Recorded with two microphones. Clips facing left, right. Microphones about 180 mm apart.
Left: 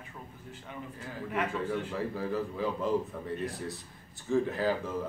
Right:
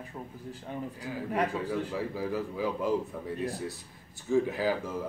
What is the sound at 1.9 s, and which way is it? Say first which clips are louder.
Speech: right 1 dB; 5° right (ahead or behind).